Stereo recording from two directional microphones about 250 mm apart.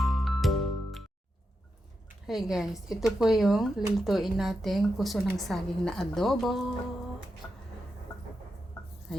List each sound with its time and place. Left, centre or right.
0.0 s music: centre
2.2 s speech: centre
7.4 s a sound: centre